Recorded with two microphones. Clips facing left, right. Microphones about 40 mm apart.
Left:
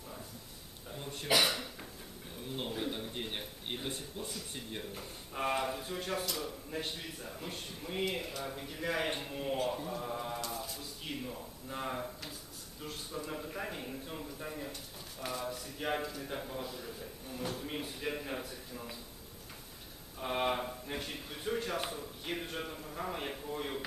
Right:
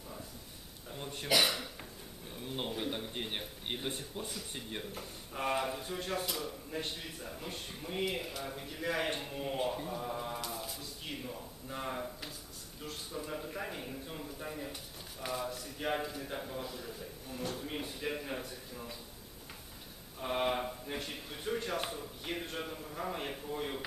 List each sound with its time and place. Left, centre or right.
1.4 s cough: centre
2.5 s a sound: centre
3.8 s speech: centre
4.3 s a man's voice: centre
20.1 s a man's voice: centre